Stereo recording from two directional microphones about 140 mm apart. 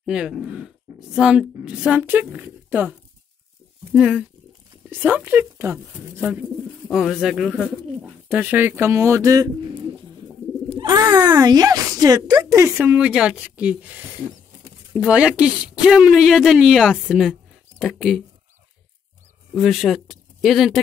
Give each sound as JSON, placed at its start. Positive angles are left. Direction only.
{"t": 0.0, "sound": "a woman's voice", "side_deg": -5}
{"t": 6.9, "sound": "a child's voice", "side_deg": -5}
{"t": 12.8, "sound": "a woman's voice", "side_deg": -10}
{"t": 19.5, "sound": "speech", "side_deg": 0}